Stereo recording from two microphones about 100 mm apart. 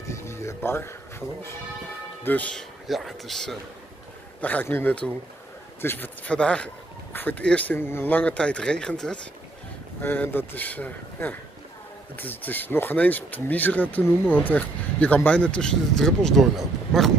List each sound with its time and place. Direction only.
0.1 s music: 30° left (ahead or behind)
2.2 s speech: 15° left (ahead or behind)
2.9 s speech: centre (ahead or behind)
4.4 s speech: 15° left (ahead or behind)
10.0 s speech: 20° left (ahead or behind); by 17.1 s centre (ahead or behind)